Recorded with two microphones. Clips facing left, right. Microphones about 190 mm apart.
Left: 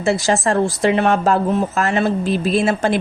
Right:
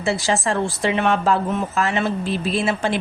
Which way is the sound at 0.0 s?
45° left (ahead or behind).